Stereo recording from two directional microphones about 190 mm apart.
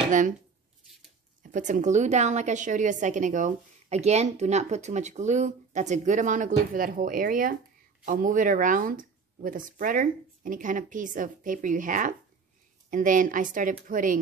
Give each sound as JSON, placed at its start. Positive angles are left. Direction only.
{"t": 1.4, "sound": "a woman's voice", "side_deg": -40}